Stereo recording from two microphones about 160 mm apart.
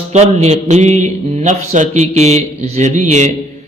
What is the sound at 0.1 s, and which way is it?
Speech, 45° right (ahead or behind).